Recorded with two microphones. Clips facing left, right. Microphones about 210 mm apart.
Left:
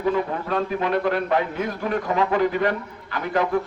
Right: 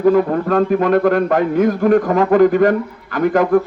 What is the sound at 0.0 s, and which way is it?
A man's voice, 50° right (ahead or behind).